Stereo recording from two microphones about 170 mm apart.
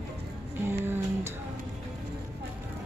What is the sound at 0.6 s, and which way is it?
Music, 15° right (ahead or behind).